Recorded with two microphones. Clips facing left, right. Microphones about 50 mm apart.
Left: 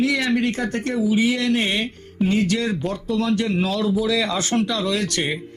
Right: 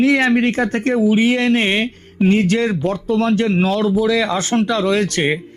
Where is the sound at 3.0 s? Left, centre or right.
Right.